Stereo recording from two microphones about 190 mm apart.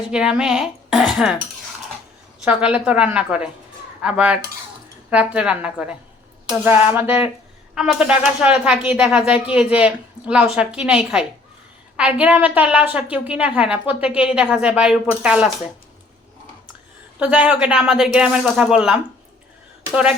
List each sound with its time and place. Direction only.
0.1 s a woman's voice: 5° right (ahead or behind)
2.4 s a woman's voice: 5° right (ahead or behind)
17.2 s a woman's voice: 5° right (ahead or behind)